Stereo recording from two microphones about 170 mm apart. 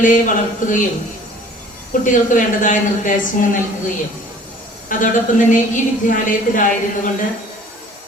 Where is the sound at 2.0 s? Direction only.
50° left (ahead or behind).